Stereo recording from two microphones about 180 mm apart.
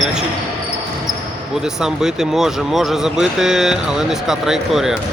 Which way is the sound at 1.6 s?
5° right (ahead or behind).